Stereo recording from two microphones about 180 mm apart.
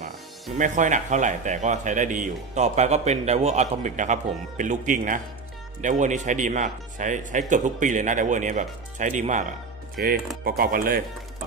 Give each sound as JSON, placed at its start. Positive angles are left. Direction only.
{"t": 0.6, "sound": "speech", "side_deg": -45}
{"t": 10.0, "sound": "speech", "side_deg": -55}